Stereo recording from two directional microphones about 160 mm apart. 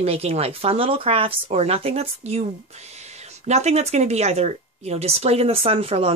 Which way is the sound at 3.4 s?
45° right (ahead or behind).